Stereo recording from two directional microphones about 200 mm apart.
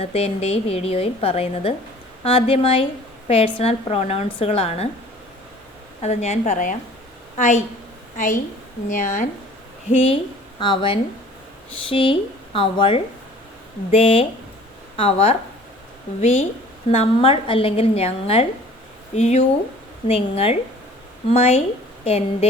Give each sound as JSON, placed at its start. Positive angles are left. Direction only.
{"t": 0.0, "sound": "a woman's voice", "side_deg": 30}
{"t": 6.0, "sound": "a woman's voice", "side_deg": 35}
{"t": 9.9, "sound": "a woman's voice", "side_deg": 30}
{"t": 16.9, "sound": "a woman's voice", "side_deg": 30}